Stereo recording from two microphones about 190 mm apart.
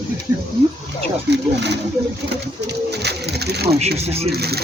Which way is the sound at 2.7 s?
60° right (ahead or behind).